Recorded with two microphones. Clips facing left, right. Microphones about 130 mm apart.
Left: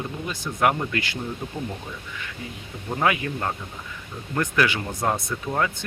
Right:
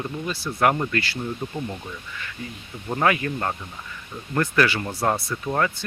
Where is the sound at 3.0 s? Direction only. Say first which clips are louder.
Right 1 dB; 10° left (ahead or behind).